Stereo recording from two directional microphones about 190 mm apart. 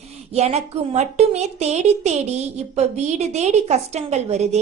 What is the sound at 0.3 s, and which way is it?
A woman's voice, 35° right (ahead or behind).